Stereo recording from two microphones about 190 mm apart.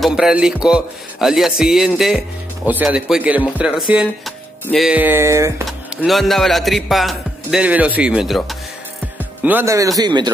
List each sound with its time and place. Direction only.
0.0 s music: 5° right (ahead or behind)
4.6 s speech: centre (ahead or behind)
5.7 s music: centre (ahead or behind)
9.2 s speech: 10° right (ahead or behind)